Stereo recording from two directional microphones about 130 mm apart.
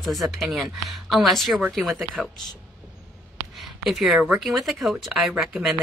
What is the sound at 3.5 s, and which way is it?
Speech, centre (ahead or behind).